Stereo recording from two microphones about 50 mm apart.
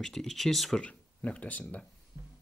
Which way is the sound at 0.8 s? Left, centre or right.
Left.